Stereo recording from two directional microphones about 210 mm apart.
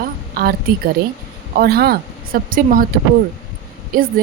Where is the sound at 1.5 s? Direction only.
50° right (ahead or behind).